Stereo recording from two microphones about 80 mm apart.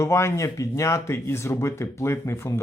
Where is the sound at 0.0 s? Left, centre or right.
Left.